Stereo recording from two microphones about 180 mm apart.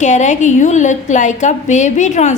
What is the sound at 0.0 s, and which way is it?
A woman's voice, 40° left (ahead or behind).